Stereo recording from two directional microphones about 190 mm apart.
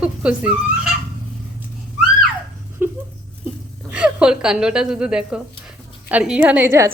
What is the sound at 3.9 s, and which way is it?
A woman's voice, 5° right (ahead or behind).